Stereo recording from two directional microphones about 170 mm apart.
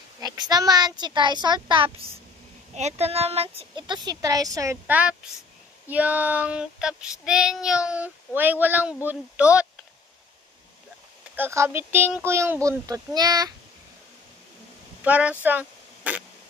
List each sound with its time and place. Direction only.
0.2 s speech: 25° right (ahead or behind)
5.9 s child singing: 10° right (ahead or behind)
8.4 s speech: 10° right (ahead or behind)
11.3 s speech: 15° right (ahead or behind)
15.0 s speech: 10° right (ahead or behind)